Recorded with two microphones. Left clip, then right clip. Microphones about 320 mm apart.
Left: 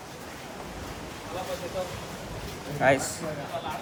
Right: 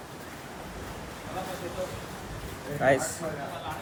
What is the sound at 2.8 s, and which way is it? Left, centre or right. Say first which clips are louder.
Speech: left 1 dB; centre.